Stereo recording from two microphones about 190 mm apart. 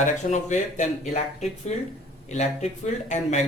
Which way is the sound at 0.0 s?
40° left (ahead or behind).